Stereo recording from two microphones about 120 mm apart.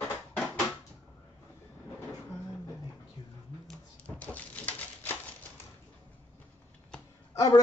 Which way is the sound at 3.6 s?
10° left (ahead or behind).